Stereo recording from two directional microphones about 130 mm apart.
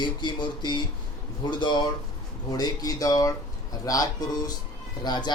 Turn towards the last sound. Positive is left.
turn(degrees=35)  # may be behind; listen again after turning